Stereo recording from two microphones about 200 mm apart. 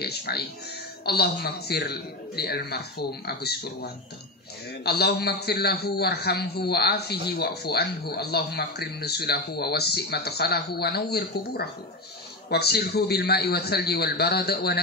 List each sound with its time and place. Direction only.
0.0 s a man's voice: 55° left (ahead or behind)